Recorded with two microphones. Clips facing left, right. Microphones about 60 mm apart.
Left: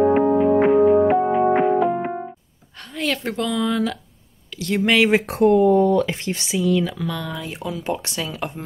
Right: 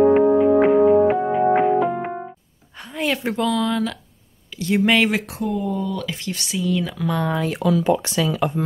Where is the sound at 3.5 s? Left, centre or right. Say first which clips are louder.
Even; centre.